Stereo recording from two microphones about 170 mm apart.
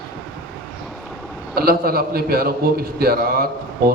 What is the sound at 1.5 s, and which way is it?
A man's voice, 60° right (ahead or behind).